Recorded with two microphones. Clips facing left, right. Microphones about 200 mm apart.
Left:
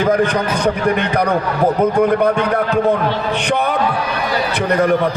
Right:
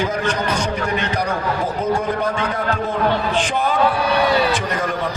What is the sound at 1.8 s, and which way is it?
A man's voice, 60° left (ahead or behind).